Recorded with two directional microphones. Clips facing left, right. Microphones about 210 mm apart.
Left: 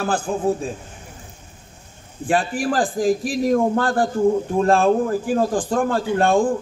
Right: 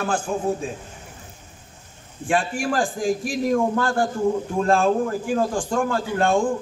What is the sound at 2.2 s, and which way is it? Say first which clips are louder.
A man's voice: left 2 dB; 35° left (ahead or behind).